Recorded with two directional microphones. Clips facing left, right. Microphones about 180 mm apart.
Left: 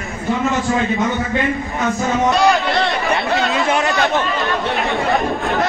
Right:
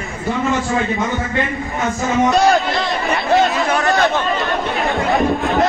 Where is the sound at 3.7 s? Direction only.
20° left (ahead or behind).